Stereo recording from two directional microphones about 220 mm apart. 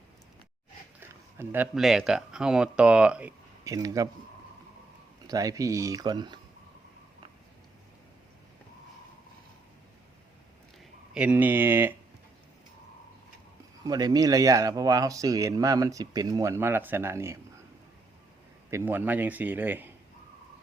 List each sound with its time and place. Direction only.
0.9 s speech: 10° right (ahead or behind)
5.2 s speech: 15° right (ahead or behind)
11.1 s speech: 5° right (ahead or behind)
13.8 s speech: 15° right (ahead or behind)
18.7 s speech: 10° right (ahead or behind)